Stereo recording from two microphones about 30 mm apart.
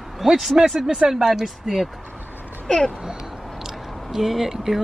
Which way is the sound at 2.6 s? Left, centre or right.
Left.